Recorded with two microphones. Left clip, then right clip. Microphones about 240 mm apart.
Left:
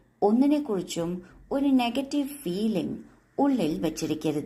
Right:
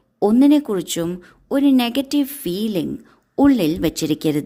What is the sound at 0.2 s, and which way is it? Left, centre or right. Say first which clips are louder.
A woman's voice: right 8 dB; right.